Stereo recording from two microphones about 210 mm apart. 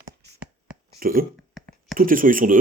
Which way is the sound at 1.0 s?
45° right (ahead or behind).